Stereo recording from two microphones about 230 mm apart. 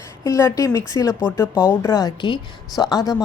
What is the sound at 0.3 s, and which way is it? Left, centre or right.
Speech, centre.